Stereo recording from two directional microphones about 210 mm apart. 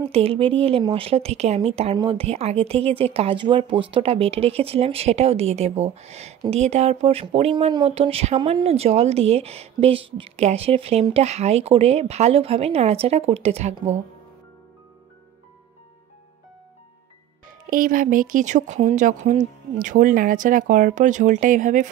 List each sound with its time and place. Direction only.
0.1 s speech: 25° right (ahead or behind)
17.6 s speech: 40° right (ahead or behind)